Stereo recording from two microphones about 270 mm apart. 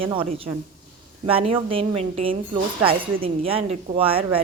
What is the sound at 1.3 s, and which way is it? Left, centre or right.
A woman's voice, right.